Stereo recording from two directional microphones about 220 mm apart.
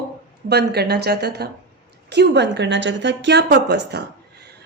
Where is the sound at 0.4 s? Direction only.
50° right (ahead or behind).